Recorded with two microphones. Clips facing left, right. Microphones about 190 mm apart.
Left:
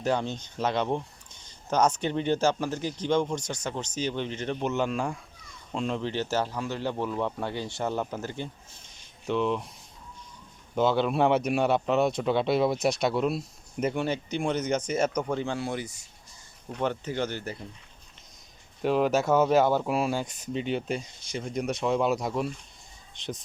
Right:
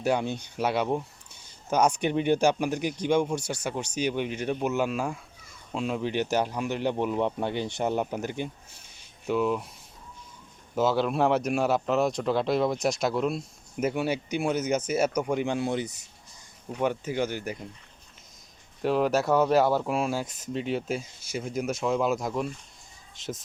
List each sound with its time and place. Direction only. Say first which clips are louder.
0.0 s speech: right 1 dB; 10° right (ahead or behind)
9.2 s speech: right 1 dB; 5° right (ahead or behind)
10.8 s speech: even; centre (ahead or behind); by 16.0 s 20° right (ahead or behind)
16.6 s speech: right 2 dB; 10° right (ahead or behind)
18.8 s speech: even; centre (ahead or behind)